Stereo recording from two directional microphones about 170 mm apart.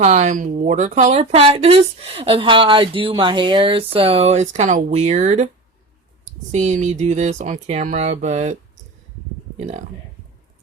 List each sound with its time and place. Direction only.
0.0 s speech: 40° right (ahead or behind)
6.5 s speech: 45° right (ahead or behind)